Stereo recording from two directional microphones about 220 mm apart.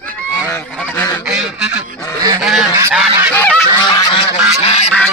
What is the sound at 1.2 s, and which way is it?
Honk, 5° right (ahead or behind).